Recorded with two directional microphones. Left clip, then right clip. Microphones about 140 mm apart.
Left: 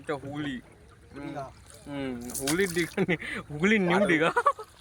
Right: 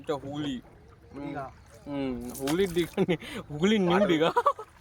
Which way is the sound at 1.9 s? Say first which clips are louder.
Right 2 dB; 10° right (ahead or behind).